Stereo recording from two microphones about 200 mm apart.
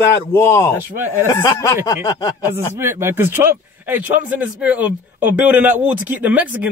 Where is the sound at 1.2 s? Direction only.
15° left (ahead or behind).